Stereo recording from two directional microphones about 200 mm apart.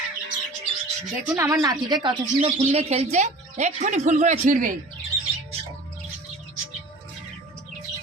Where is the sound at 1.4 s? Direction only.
15° right (ahead or behind); by 4.7 s 35° right (ahead or behind).